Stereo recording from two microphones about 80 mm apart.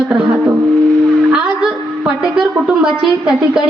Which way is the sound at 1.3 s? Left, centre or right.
Centre.